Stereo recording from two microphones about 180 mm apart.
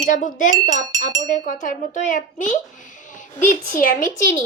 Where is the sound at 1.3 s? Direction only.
45° left (ahead or behind).